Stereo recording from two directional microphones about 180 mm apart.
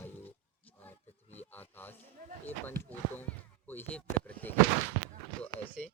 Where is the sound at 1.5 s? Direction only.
10° left (ahead or behind).